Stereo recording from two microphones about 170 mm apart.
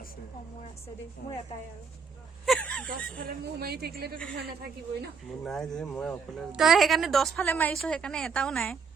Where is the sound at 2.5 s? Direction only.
5° left (ahead or behind).